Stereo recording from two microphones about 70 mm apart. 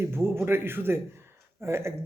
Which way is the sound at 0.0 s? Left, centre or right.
Right.